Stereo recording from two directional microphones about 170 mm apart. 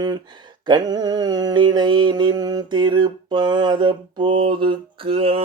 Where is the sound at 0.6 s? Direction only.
25° right (ahead or behind).